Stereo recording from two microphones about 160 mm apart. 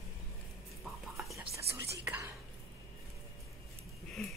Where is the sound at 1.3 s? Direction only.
15° right (ahead or behind).